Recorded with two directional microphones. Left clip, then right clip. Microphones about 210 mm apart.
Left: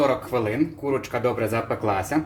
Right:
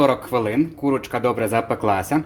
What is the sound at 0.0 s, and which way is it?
Speech, 45° right (ahead or behind).